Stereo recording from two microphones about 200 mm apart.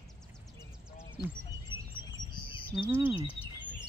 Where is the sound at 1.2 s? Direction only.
50° left (ahead or behind).